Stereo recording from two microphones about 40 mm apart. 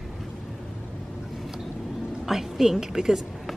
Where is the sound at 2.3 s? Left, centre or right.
Centre.